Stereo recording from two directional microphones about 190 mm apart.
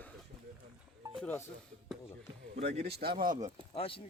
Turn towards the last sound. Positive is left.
turn(degrees=30)  # may be behind; listen again after turning